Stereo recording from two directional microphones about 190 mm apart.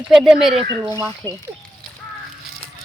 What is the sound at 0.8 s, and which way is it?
Speech, 15° right (ahead or behind).